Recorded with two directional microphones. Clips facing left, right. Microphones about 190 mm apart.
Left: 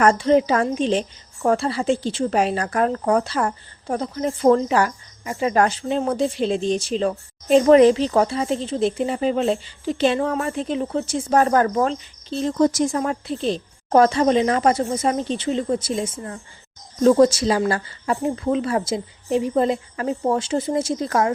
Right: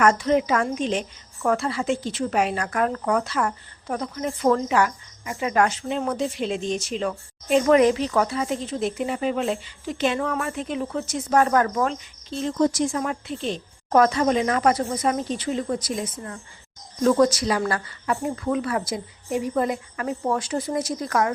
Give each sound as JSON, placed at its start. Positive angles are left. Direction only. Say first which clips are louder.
{"t": 0.0, "sound": "a woman's voice", "louder": "left 3 dB", "side_deg": 30}